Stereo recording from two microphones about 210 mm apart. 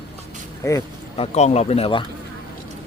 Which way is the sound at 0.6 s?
15° left (ahead or behind).